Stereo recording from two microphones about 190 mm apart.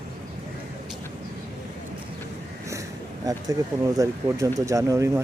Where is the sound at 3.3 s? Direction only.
20° right (ahead or behind).